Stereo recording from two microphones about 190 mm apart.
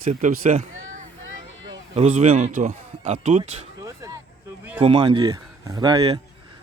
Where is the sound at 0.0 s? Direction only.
40° right (ahead or behind).